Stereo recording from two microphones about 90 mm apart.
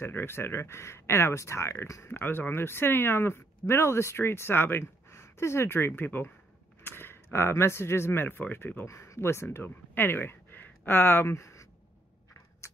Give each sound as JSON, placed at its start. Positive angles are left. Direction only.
{"t": 0.0, "sound": "speech", "side_deg": 25}
{"t": 2.0, "sound": "speech", "side_deg": 25}